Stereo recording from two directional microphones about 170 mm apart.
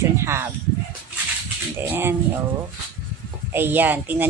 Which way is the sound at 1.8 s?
15° right (ahead or behind).